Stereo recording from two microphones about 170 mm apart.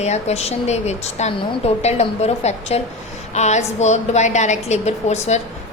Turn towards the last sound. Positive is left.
turn(degrees=40)  # may be behind; listen again after turning